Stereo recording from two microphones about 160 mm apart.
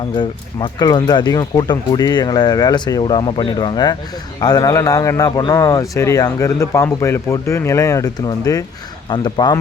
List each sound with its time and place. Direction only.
0.2 s speech: 25° left (ahead or behind)